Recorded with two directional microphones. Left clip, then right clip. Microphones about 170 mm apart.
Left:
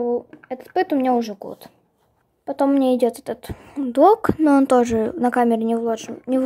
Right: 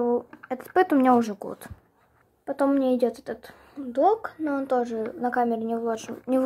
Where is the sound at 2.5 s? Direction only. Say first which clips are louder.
Left 5 dB; 20° left (ahead or behind).